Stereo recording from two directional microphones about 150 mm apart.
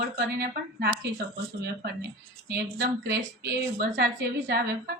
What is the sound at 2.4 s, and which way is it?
Speech, 90° right.